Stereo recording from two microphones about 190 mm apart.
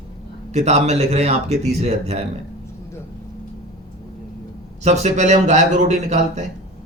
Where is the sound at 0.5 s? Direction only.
35° right (ahead or behind).